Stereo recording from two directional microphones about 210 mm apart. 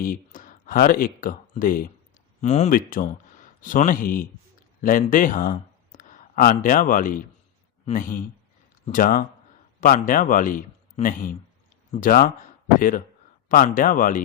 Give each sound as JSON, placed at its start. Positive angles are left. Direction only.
{"t": 0.0, "sound": "a man's voice", "side_deg": 40}
{"t": 13.5, "sound": "a man's voice", "side_deg": 45}